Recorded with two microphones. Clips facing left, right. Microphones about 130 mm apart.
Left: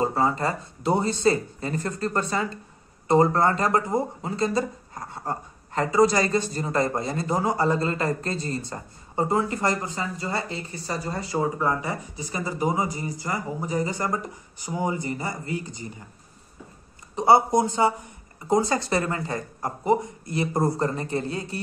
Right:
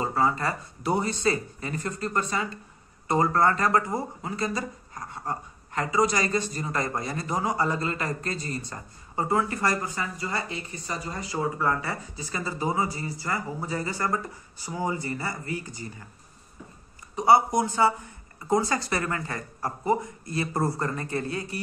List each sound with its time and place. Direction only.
0.0 s speech: 30° left (ahead or behind)
11.3 s speech: 20° left (ahead or behind)
17.1 s speech: 25° left (ahead or behind)